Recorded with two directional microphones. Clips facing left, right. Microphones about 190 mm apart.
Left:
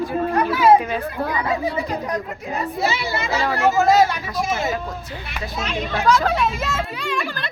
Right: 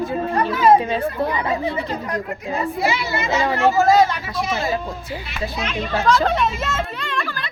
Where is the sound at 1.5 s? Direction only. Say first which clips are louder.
Even; 10° left (ahead or behind).